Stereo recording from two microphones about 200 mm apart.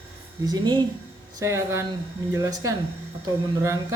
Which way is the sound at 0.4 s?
20° right (ahead or behind).